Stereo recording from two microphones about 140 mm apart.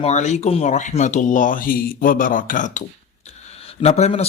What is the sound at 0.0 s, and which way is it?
Speech, 55° left (ahead or behind).